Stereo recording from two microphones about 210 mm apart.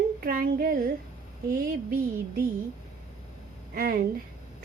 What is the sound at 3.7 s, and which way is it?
Speech, 45° right (ahead or behind).